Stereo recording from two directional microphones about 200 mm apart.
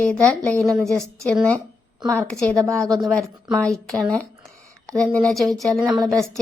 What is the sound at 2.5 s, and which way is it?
Speech, 15° right (ahead or behind).